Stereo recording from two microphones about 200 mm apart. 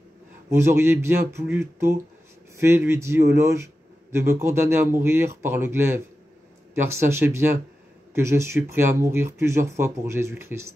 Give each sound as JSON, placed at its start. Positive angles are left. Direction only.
{"t": 0.5, "sound": "a man's voice", "side_deg": -15}